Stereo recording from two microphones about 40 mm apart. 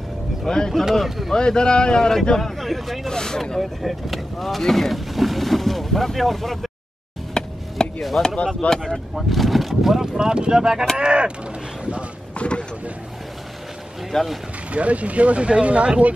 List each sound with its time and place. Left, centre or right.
0.5 s speech: centre
0.9 s speech: centre
1.3 s speech: centre
3.1 s speech: centre
7.3 s a sound: centre
8.2 s speech: centre
8.9 s speech: centre
10.1 s speech: centre
12.4 s a sound: left
14.1 s speech: centre
14.7 s speech: right